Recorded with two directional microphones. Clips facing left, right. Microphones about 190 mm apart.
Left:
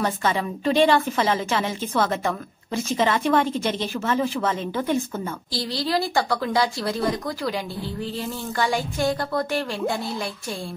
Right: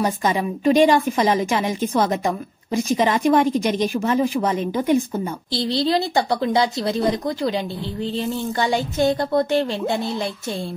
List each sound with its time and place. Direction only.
0.0 s a woman's voice: 15° right (ahead or behind)